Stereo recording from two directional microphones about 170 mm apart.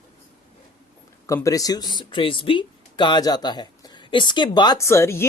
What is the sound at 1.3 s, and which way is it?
Speech, 20° left (ahead or behind).